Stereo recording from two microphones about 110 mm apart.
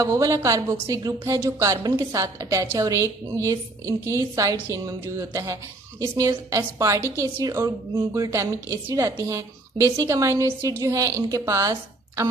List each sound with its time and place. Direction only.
0.0 s a woman's voice: 30° right (ahead or behind)